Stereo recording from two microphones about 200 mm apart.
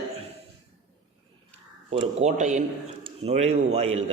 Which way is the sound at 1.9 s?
30° right (ahead or behind).